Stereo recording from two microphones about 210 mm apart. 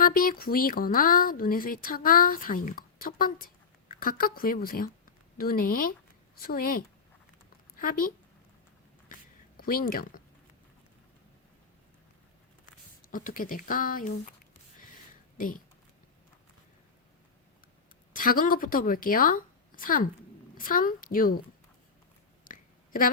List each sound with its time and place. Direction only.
0.0 s speech: 45° left (ahead or behind)
9.6 s speech: 45° left (ahead or behind)
13.1 s speech: 40° left (ahead or behind)
15.4 s speech: 40° left (ahead or behind)
18.1 s a woman's voice: 40° left (ahead or behind)
22.4 s a sound: 40° left (ahead or behind)